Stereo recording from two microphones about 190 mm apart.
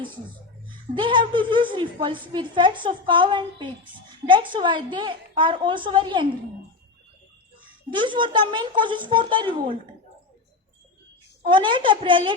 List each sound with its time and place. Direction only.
0.9 s a woman's voice: 25° right (ahead or behind)
7.9 s a woman's voice: 25° right (ahead or behind)
11.4 s a woman's voice: 25° right (ahead or behind)